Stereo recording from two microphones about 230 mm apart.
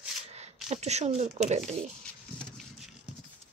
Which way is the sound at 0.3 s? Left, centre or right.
Right.